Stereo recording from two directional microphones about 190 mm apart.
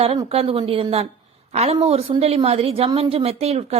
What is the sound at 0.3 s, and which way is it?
Speech, 30° right (ahead or behind).